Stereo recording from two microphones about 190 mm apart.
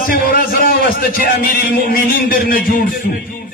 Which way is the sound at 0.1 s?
45° left (ahead or behind).